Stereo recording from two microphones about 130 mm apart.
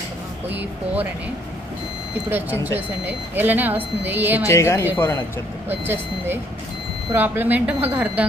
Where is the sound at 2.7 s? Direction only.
15° right (ahead or behind).